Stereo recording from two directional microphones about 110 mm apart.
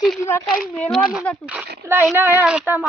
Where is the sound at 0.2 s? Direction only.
25° left (ahead or behind).